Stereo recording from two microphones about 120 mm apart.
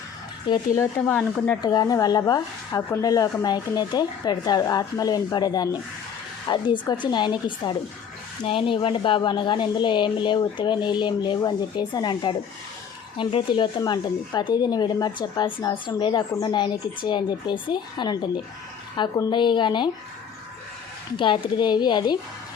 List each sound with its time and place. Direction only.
0.5 s speech: 40° left (ahead or behind)
1.0 s speech: 10° left (ahead or behind)
1.6 s speech: 35° left (ahead or behind)
21.2 s speech: 45° left (ahead or behind)